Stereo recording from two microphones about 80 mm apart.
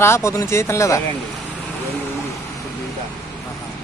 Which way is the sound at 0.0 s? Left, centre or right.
Left.